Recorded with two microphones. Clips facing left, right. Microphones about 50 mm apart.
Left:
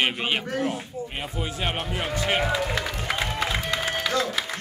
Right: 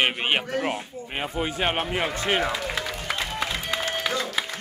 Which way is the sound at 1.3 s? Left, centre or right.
Right.